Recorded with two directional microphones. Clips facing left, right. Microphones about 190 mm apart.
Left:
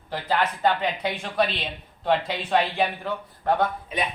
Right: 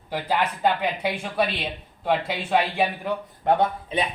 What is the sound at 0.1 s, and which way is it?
Speech, 10° right (ahead or behind).